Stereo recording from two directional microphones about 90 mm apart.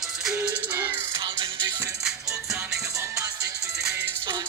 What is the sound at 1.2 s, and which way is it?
Music, 55° right (ahead or behind).